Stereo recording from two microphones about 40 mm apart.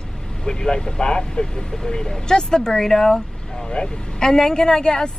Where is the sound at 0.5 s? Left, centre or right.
Centre.